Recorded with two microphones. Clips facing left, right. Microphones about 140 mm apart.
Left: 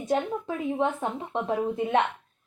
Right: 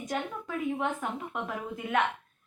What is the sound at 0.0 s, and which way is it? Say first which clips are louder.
A woman's voice: left 7 dB; 25° left (ahead or behind).